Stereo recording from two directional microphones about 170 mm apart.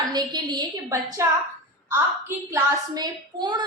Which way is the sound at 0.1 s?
25° right (ahead or behind).